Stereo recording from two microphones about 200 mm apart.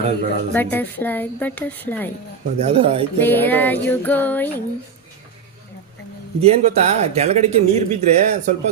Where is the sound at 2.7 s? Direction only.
30° right (ahead or behind).